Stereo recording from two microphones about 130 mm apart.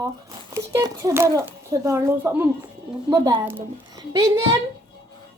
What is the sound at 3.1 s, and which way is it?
A child's voice, 30° right (ahead or behind).